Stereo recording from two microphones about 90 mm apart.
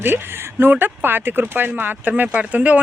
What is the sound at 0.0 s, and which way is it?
Speech, 25° right (ahead or behind).